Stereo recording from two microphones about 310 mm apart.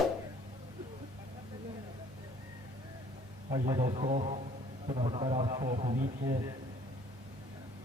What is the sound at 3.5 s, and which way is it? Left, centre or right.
A man's voice, centre.